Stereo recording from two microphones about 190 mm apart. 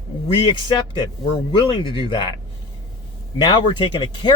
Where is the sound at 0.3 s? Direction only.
30° left (ahead or behind).